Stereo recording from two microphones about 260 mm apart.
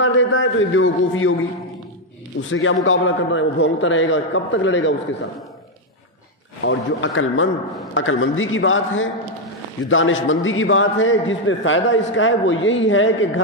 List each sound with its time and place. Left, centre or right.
0.0 s a man's voice: left
2.5 s a man's voice: left
6.6 s a man's voice: left